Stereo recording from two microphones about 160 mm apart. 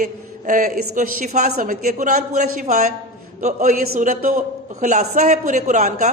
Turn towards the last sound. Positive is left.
turn(degrees=-50)  # may be behind; listen again after turning